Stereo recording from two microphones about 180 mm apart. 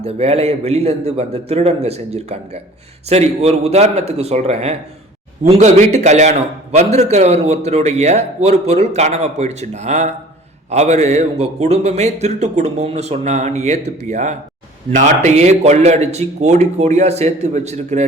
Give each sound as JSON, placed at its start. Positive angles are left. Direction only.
{"t": 0.0, "sound": "a man's voice", "side_deg": -35}